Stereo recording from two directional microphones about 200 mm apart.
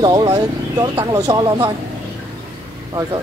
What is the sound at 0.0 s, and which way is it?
Speech, 20° right (ahead or behind).